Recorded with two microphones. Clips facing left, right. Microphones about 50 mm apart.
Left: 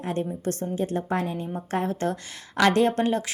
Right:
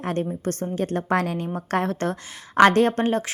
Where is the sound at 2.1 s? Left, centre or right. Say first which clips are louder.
Right 1 dB; right.